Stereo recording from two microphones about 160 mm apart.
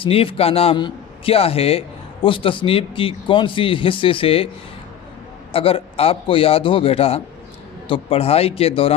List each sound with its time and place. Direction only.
0.0 s a man's voice: 35° left (ahead or behind)
5.5 s a man's voice: 35° left (ahead or behind)